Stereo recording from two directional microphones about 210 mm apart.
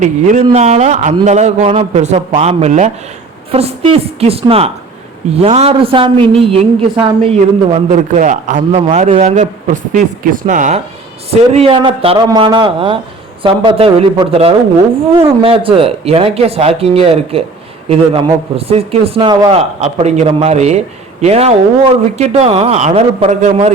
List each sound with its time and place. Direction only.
0.0 s a woman's voice: 35° right (ahead or behind)